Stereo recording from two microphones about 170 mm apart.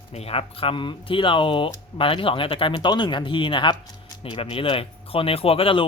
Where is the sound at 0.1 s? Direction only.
35° left (ahead or behind).